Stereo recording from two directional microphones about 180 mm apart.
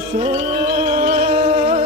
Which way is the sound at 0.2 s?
35° right (ahead or behind).